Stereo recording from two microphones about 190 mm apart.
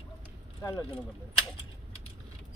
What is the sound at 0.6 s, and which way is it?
Speech, 15° left (ahead or behind).